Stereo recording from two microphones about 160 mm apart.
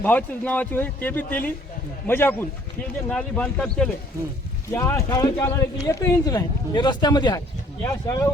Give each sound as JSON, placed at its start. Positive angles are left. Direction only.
{"t": 0.0, "sound": "a man's voice", "side_deg": 10}